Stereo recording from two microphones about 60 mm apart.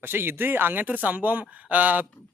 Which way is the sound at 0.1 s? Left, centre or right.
Right.